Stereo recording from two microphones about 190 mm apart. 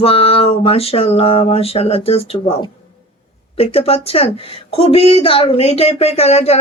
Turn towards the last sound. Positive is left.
turn(degrees=35)  # may be behind; listen again after turning